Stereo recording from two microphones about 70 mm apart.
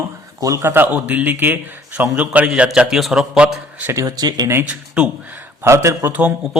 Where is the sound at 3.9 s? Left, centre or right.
Right.